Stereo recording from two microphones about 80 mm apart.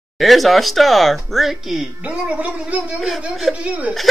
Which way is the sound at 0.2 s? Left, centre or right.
Centre.